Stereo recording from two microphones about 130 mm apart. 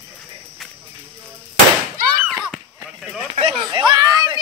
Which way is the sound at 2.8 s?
5° right (ahead or behind).